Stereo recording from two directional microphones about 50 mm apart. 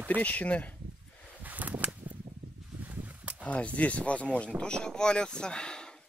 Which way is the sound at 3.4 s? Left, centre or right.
Left.